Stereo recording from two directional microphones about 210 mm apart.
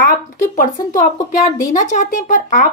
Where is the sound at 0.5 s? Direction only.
40° left (ahead or behind).